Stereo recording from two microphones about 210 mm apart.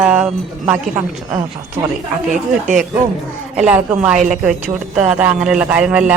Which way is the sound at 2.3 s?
40° right (ahead or behind).